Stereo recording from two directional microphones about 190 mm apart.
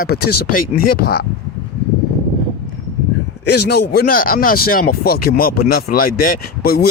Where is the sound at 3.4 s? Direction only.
60° left (ahead or behind).